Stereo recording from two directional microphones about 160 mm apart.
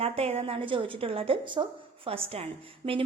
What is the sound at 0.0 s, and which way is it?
A woman's voice, 40° right (ahead or behind).